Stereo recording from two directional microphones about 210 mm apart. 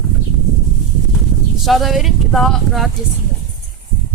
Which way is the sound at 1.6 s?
Centre (ahead or behind).